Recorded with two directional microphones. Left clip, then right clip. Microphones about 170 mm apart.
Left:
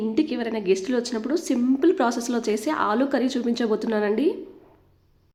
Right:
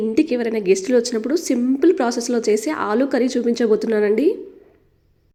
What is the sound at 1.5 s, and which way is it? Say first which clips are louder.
Speech: right 3 dB; 5° right (ahead or behind).